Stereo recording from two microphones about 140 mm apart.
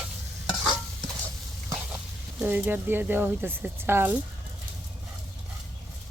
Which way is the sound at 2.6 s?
15° right (ahead or behind).